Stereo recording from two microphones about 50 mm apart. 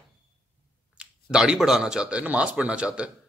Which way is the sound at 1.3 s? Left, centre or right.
Centre.